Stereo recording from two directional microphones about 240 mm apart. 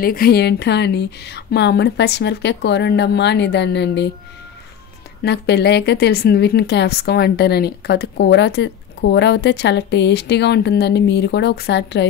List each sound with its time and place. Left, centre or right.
0.0 s a woman's voice: left
5.2 s a woman's voice: left